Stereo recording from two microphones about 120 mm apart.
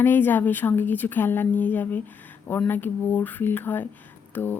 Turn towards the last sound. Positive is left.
turn(degrees=15)  # may be behind; listen again after turning